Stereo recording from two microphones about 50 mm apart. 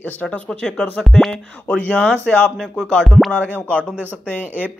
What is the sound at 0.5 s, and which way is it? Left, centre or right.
Speech, centre.